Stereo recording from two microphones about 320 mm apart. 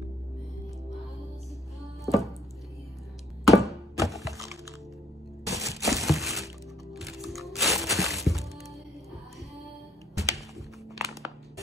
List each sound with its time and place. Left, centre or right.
2.0 s music: centre
3.4 s thunk: centre
5.4 s music: centre
10.1 s music: centre
11.0 s a sound: centre